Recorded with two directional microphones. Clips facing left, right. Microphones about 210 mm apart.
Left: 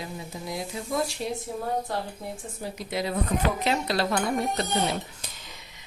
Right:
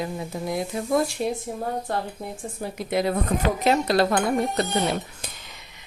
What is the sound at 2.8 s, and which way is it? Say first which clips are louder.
A woman's voice: right 5 dB; 55° right (ahead or behind).